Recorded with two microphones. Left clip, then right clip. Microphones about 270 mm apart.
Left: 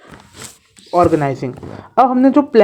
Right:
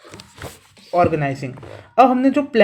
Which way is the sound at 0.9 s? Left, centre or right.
Left.